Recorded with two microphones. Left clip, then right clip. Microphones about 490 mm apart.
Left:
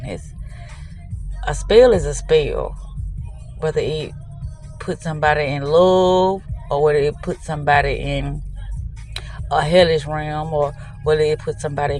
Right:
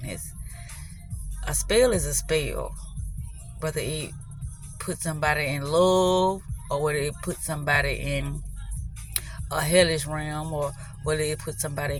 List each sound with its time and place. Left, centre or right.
1.5 s speech: right